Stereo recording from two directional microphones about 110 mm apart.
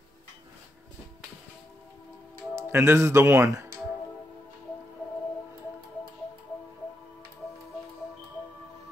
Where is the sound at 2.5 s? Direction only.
25° right (ahead or behind).